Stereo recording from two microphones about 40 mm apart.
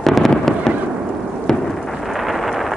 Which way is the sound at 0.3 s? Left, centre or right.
Centre.